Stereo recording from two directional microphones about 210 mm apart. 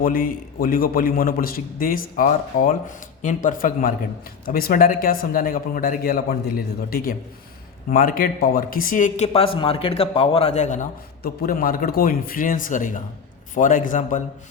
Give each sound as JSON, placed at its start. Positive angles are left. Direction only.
{"t": 0.0, "sound": "a man's voice", "side_deg": 45}